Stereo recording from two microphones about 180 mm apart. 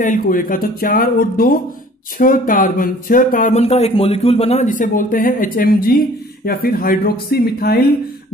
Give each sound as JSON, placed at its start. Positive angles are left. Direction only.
{"t": 0.0, "sound": "speech", "side_deg": 50}